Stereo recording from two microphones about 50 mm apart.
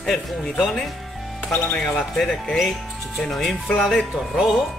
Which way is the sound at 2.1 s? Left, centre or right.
Centre.